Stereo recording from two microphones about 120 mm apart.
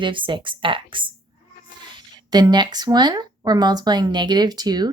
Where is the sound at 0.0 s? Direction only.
45° right (ahead or behind).